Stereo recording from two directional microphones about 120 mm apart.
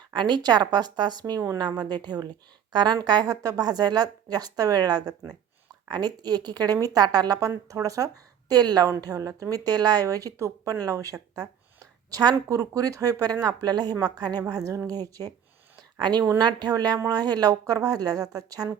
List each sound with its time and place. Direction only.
0.1 s speech: 40° right (ahead or behind)